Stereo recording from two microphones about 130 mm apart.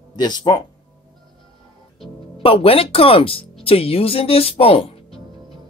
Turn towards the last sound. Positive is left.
turn(degrees=45)  # may be behind; listen again after turning